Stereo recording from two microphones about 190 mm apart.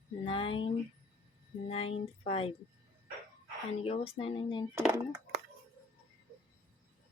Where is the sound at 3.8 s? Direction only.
30° left (ahead or behind).